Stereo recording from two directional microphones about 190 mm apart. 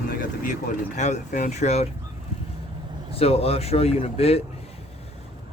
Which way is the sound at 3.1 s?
30° left (ahead or behind).